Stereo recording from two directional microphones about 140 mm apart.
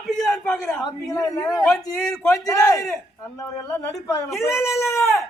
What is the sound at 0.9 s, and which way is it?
Speech, 20° left (ahead or behind).